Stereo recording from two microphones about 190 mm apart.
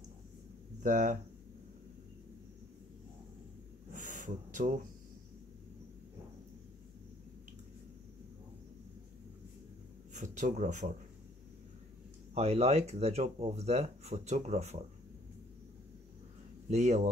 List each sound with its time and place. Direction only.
0.8 s speech: 40° right (ahead or behind)
3.9 s a sound: 40° right (ahead or behind)
10.1 s speech: 40° right (ahead or behind)
12.4 s speech: 35° right (ahead or behind)
16.6 s speech: 35° right (ahead or behind)